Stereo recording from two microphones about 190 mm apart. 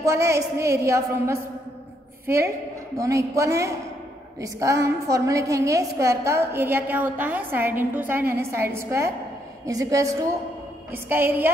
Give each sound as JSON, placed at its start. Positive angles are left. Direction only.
{"t": 0.0, "sound": "a woman's voice", "side_deg": -15}